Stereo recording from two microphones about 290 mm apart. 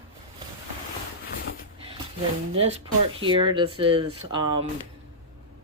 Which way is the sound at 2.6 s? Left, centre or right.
Centre.